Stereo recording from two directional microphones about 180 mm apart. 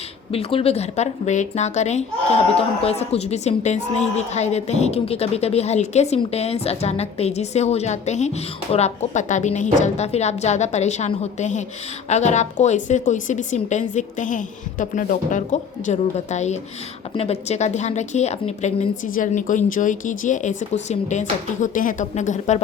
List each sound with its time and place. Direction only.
0.3 s a woman's voice: 35° left (ahead or behind)